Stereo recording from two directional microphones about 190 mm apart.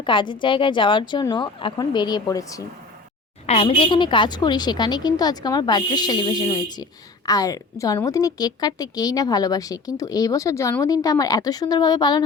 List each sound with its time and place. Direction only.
0.0 s a woman's voice: 25° left (ahead or behind)
3.4 s a woman's voice: 35° left (ahead or behind)